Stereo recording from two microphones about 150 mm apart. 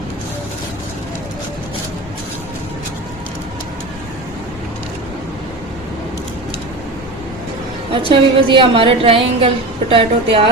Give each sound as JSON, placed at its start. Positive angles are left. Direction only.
{"t": 8.1, "sound": "a woman's voice", "side_deg": -35}